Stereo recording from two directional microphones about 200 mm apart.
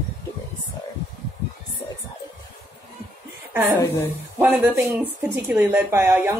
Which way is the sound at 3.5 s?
10° right (ahead or behind).